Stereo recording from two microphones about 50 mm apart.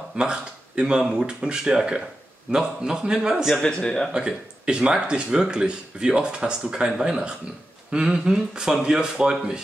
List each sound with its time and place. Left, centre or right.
0.1 s speech: centre
3.5 s speech: centre
4.1 s speech: centre